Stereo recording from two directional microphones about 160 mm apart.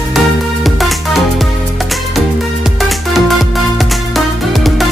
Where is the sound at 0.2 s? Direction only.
Centre (ahead or behind).